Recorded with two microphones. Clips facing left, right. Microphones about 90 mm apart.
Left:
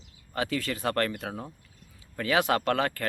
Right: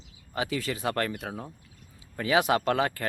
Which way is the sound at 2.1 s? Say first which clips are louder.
Right 1 dB; 15° right (ahead or behind).